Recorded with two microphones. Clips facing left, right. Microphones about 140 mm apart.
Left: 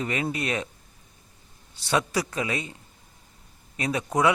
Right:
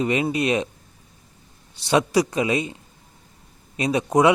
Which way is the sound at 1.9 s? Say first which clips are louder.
Right 6 dB; 20° right (ahead or behind).